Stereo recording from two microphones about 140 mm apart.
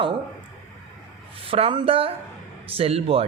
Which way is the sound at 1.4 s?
45° right (ahead or behind).